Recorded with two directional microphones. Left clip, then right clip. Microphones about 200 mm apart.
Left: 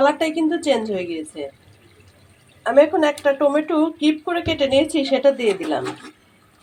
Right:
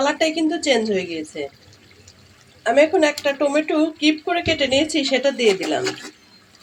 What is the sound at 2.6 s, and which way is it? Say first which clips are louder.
Speech: left 1 dB; 5° left (ahead or behind).